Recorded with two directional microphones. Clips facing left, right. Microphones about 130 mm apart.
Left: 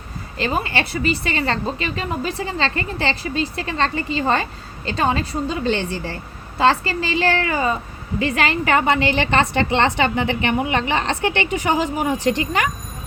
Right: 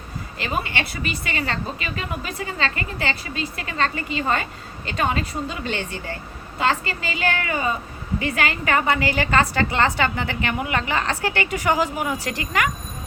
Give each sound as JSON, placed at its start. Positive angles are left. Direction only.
{"t": 0.3, "sound": "a woman's voice", "side_deg": 30}